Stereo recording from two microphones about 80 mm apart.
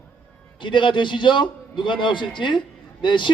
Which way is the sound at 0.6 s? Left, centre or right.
Left.